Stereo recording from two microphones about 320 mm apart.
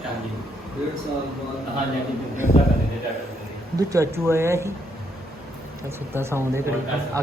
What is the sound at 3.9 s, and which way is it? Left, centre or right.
Speech, centre.